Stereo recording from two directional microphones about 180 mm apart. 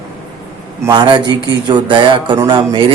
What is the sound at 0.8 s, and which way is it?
A man's voice, 25° right (ahead or behind).